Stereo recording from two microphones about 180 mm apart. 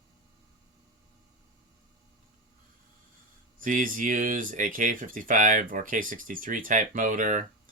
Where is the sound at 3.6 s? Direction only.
50° right (ahead or behind).